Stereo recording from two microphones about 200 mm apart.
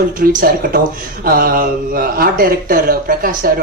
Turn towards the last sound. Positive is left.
turn(degrees=-45)  # may be behind; listen again after turning